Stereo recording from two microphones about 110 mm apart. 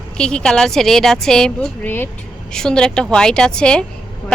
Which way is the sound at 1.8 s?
15° left (ahead or behind).